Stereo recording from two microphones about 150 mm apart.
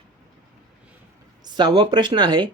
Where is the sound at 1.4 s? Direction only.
30° right (ahead or behind).